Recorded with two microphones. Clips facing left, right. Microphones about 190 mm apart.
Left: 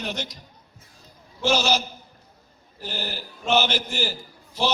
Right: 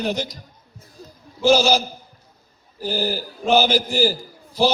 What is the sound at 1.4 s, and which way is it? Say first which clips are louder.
A man's voice: right 6 dB; 35° right (ahead or behind).